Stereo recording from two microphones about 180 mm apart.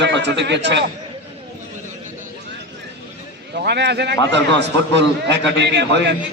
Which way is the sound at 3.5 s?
65° right (ahead or behind).